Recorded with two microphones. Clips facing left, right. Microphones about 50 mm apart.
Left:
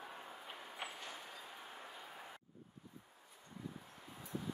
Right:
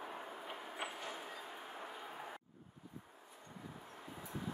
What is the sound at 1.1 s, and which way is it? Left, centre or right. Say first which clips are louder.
Train: right 4 dB; centre.